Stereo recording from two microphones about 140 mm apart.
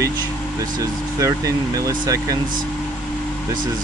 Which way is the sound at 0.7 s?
25° right (ahead or behind).